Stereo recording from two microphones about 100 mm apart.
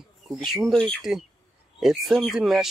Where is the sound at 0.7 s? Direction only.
5° left (ahead or behind).